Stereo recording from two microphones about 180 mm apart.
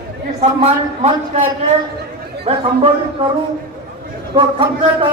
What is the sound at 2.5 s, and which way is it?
Speech, 35° right (ahead or behind).